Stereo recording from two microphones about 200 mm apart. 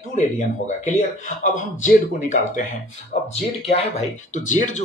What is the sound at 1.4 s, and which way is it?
Speech, 40° left (ahead or behind).